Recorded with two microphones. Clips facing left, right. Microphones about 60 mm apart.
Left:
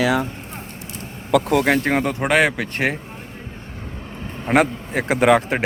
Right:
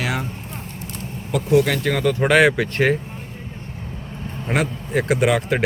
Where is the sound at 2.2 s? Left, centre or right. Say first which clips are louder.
Right 5 dB; centre.